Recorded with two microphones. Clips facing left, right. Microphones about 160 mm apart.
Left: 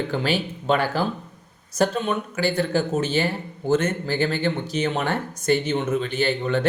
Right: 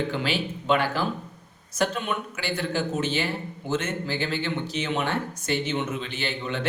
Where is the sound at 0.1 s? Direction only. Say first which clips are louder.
Left 4 dB; 40° left (ahead or behind).